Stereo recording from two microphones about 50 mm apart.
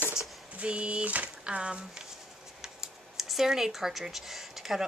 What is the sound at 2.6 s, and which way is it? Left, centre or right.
Speech, centre.